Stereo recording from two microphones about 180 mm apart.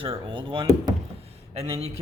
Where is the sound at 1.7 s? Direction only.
35° right (ahead or behind).